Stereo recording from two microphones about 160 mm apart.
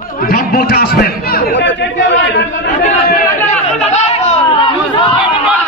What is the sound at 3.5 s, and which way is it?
Chatter, 45° left (ahead or behind).